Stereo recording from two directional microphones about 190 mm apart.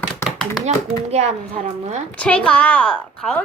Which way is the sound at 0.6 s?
35° right (ahead or behind).